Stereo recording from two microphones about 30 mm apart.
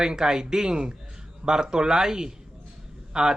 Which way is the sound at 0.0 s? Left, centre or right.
Right.